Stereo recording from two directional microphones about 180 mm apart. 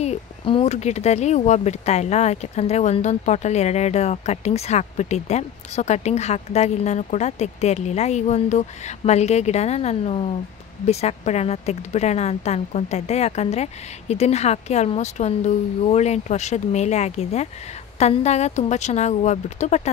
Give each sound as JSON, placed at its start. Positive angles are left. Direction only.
{"t": 0.0, "sound": "speech", "side_deg": 35}